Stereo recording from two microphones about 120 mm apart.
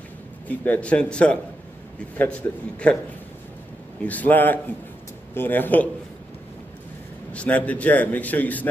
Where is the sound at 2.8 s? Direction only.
10° left (ahead or behind).